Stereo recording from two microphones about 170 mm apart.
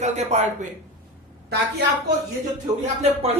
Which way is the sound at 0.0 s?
40° right (ahead or behind).